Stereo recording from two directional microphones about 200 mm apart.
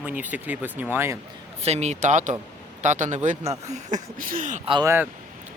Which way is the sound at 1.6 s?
35° right (ahead or behind).